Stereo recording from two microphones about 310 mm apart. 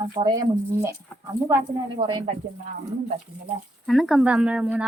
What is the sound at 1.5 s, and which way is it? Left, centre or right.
Speech, centre.